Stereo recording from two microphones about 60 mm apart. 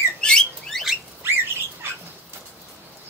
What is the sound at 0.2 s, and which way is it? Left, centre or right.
Bird, centre.